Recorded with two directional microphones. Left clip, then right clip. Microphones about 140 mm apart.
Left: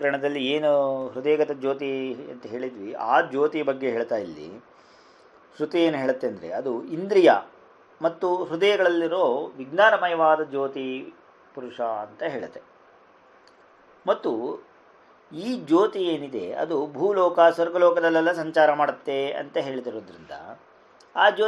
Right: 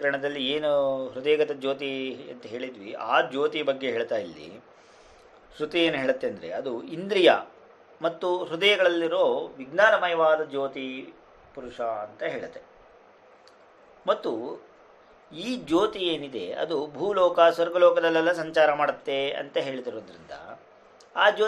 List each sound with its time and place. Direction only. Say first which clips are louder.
0.0 s speech: left 2 dB; 35° left (ahead or behind); by 2.7 s 15° left (ahead or behind)
2.9 s speech: left 3 dB; 45° left (ahead or behind)
3.5 s speech: left 2 dB; 15° left (ahead or behind)
4.1 s speech: left 2 dB; 40° left (ahead or behind)
5.6 s speech: left 2 dB; 35° left (ahead or behind)
14.0 s speech: left 2 dB; 35° left (ahead or behind)